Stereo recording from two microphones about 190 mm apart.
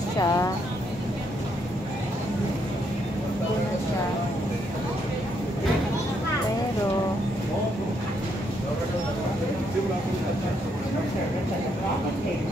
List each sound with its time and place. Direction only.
0.2 s speech: 15° left (ahead or behind)